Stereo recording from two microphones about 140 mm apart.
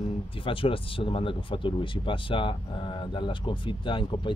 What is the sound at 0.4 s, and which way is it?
Speech, 40° left (ahead or behind).